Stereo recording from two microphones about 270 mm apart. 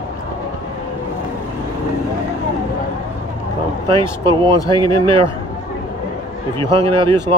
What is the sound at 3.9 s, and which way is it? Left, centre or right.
Speech, centre.